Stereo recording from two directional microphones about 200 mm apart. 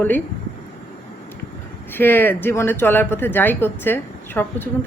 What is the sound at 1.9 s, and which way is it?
Speech, 10° left (ahead or behind).